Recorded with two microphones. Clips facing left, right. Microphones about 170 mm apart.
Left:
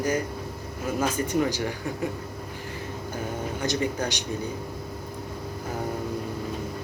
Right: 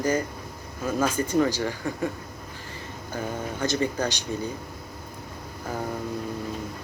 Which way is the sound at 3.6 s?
15° left (ahead or behind).